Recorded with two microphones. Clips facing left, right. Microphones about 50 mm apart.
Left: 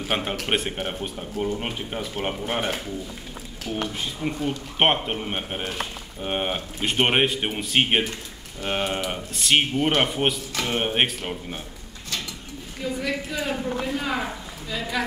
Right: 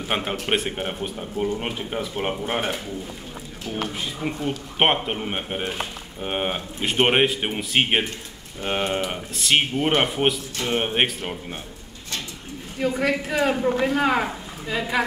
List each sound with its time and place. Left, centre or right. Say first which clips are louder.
0.1 s speech: right 1 dB; centre
4.0 s speech: even; centre
12.8 s a woman's voice: right 5 dB; right
14.7 s a woman's voice: right 4 dB; right